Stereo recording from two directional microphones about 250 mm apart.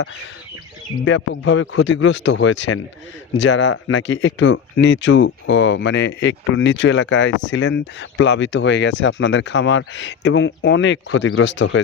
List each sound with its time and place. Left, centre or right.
1.0 s speech: left